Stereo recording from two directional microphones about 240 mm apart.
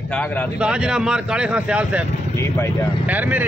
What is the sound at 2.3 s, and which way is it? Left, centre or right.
Speech, centre.